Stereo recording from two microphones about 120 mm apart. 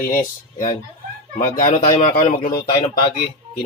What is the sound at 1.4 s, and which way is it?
Speech, 90° left.